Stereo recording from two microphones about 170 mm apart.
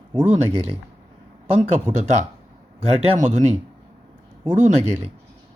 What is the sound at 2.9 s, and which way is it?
Speech, 45° right (ahead or behind).